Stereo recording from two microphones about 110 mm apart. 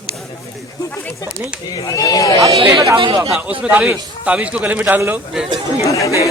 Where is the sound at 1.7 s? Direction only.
35° left (ahead or behind).